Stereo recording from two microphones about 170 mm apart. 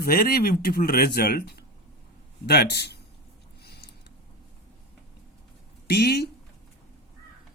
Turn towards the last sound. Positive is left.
turn(degrees=70)  # may be behind; listen again after turning